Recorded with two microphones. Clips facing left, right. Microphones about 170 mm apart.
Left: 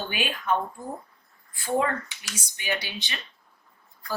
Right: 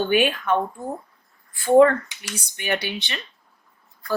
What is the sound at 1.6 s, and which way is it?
Speech, 60° right (ahead or behind).